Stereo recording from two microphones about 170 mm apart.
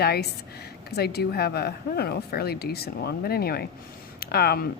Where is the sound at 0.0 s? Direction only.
65° left (ahead or behind).